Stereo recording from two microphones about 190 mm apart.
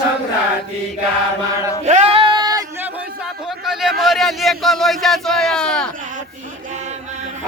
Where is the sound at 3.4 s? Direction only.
Centre (ahead or behind).